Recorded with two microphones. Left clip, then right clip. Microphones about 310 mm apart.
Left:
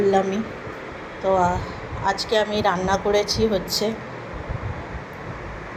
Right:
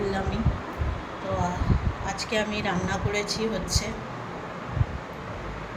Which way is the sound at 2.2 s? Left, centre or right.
Centre.